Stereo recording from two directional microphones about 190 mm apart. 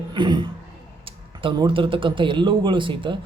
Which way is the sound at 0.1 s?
25° right (ahead or behind).